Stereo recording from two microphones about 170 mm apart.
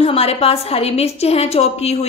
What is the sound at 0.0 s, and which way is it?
A woman's voice, 35° left (ahead or behind).